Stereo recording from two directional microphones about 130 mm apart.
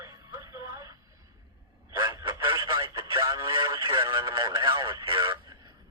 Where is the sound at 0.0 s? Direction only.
20° right (ahead or behind).